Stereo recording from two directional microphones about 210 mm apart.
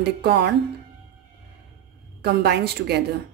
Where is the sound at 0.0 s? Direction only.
50° right (ahead or behind).